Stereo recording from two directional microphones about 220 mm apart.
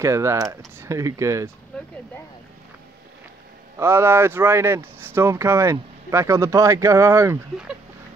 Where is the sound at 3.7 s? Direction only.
10° right (ahead or behind).